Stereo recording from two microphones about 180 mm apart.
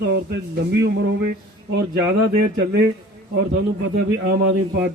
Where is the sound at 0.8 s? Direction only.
75° right (ahead or behind).